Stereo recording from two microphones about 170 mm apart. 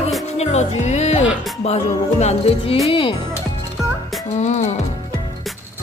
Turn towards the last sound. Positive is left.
turn(degrees=45)  # may be behind; listen again after turning